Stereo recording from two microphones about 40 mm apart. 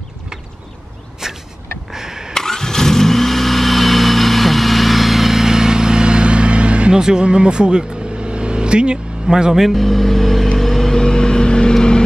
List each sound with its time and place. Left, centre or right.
1.2 s a sound: centre
2.3 s vehicle: centre; by 7.0 s right
7.0 s speech: centre
10.6 s vehicle: centre